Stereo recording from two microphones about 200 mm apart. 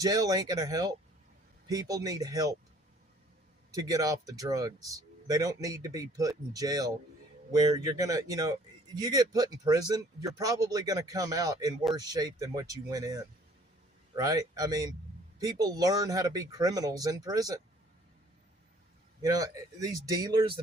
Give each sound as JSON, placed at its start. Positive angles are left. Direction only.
{"t": 0.0, "sound": "speech", "side_deg": -20}
{"t": 3.7, "sound": "speech", "side_deg": -20}
{"t": 19.2, "sound": "speech", "side_deg": -15}